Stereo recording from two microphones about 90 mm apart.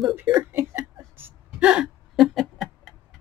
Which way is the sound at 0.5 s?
20° right (ahead or behind).